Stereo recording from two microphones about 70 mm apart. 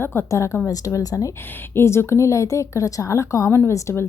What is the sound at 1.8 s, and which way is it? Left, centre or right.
Speech, left.